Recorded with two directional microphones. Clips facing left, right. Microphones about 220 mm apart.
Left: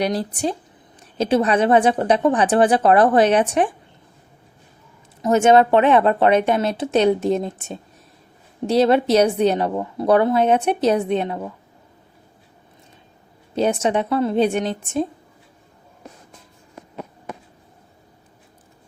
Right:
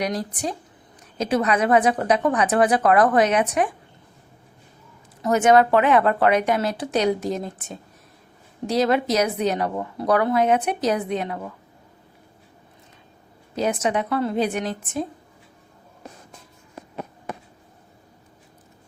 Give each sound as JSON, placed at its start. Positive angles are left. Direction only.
{"t": 0.0, "sound": "a woman's voice", "side_deg": 30}
{"t": 5.2, "sound": "a woman's voice", "side_deg": 25}
{"t": 13.6, "sound": "a woman's voice", "side_deg": 30}